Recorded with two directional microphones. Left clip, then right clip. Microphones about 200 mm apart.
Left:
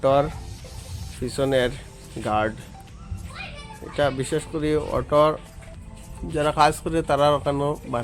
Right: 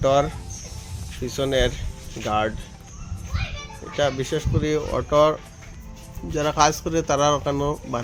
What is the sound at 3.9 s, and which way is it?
A man's voice, 15° left (ahead or behind).